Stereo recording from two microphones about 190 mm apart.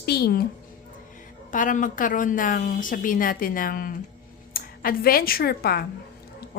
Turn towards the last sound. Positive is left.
turn(degrees=55)  # may be behind; listen again after turning